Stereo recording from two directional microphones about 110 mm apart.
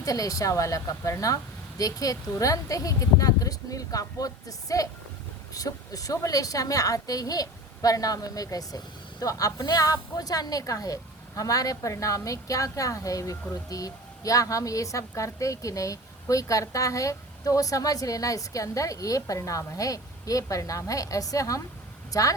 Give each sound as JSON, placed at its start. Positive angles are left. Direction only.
{"t": 0.0, "sound": "a woman's voice", "side_deg": 30}